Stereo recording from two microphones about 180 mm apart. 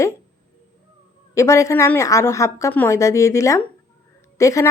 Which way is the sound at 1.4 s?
15° left (ahead or behind).